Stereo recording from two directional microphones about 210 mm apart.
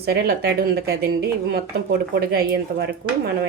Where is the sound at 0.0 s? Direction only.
50° right (ahead or behind).